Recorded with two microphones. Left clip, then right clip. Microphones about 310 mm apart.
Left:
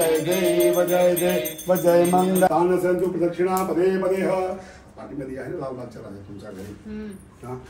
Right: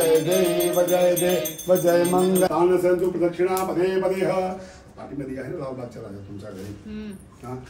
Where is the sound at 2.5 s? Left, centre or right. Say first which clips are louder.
Right 1 dB; centre.